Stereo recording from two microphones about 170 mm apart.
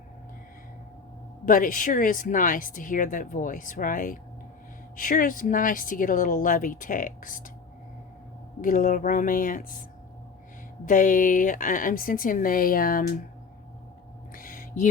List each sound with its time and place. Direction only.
1.5 s speech: 50° left (ahead or behind)
8.6 s speech: 55° left (ahead or behind)
10.8 s speech: 50° left (ahead or behind)
14.3 s a sound: 55° left (ahead or behind)